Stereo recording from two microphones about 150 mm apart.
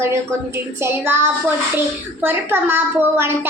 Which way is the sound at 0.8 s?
15° right (ahead or behind).